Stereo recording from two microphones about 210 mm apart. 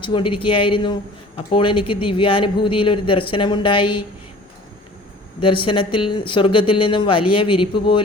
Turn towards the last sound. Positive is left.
turn(degrees=20)  # may be behind; listen again after turning